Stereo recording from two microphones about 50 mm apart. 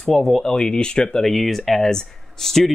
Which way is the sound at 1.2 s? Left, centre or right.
Centre.